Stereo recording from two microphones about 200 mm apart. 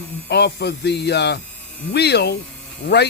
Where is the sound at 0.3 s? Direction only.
55° left (ahead or behind).